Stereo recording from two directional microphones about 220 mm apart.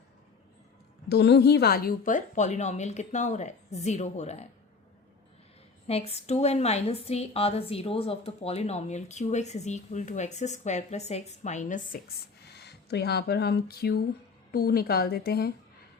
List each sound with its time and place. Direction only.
1.0 s a woman's voice: 50° left (ahead or behind); by 4.4 s 30° left (ahead or behind)
5.9 s a woman's voice: 25° left (ahead or behind); by 15.5 s 45° left (ahead or behind)